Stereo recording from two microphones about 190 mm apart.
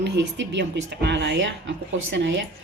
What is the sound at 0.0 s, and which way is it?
Speech, 70° right (ahead or behind).